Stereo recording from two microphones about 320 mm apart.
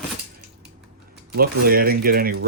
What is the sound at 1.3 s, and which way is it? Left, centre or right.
Speech, right.